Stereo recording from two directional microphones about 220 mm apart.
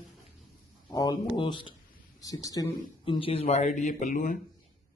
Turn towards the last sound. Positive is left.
turn(degrees=35)  # may be behind; listen again after turning